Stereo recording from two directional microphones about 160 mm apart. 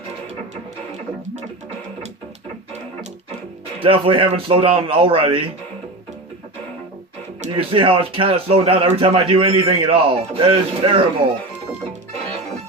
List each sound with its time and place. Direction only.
3.8 s speech: 35° right (ahead or behind)
7.4 s speech: 35° right (ahead or behind)